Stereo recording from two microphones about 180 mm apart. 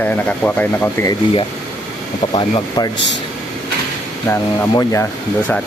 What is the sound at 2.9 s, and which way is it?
Speech, 80° left.